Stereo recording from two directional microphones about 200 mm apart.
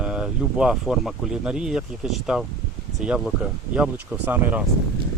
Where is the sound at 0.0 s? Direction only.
5° right (ahead or behind).